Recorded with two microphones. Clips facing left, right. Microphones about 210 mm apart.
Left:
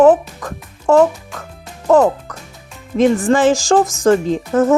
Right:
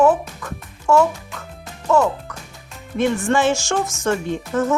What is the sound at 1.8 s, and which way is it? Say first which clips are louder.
Speech: left 6 dB; 50° left (ahead or behind).